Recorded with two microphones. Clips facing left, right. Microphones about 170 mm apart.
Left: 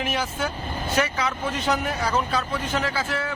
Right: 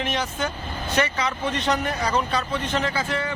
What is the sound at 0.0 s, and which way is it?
Speech, 5° left (ahead or behind).